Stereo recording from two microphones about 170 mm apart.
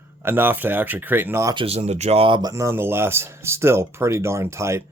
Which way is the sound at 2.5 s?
15° right (ahead or behind).